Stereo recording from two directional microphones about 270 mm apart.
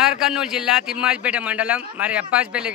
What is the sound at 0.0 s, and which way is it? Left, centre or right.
A man's voice, centre.